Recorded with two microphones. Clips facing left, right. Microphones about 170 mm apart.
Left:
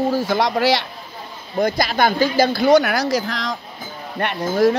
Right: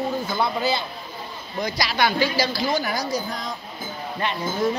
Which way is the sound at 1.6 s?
55° left (ahead or behind).